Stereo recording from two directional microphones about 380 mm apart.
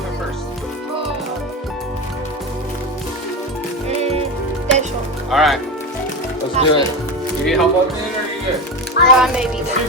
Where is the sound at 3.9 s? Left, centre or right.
Centre.